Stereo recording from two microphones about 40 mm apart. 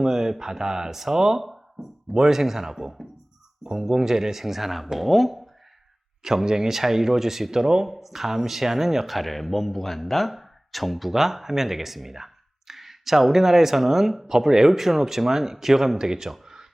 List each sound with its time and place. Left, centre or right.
0.0 s speech: centre
6.2 s speech: centre